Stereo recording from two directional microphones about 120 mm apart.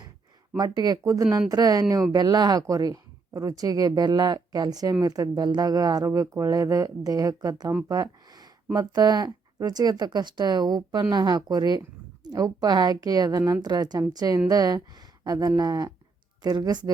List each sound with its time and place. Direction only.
0.5 s speech: 35° right (ahead or behind)
8.7 s speech: 35° right (ahead or behind)